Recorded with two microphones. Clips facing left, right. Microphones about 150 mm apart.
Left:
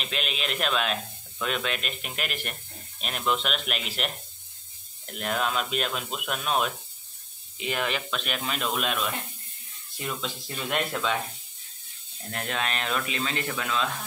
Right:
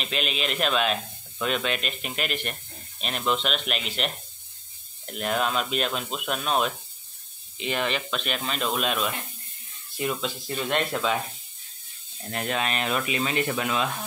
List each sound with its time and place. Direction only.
0.0 s speech: centre (ahead or behind)
12.3 s speech: 5° right (ahead or behind)